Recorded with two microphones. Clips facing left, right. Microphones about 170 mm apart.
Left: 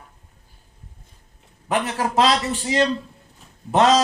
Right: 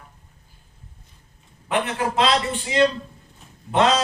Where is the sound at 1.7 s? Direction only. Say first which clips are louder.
Left 1 dB; 40° left (ahead or behind).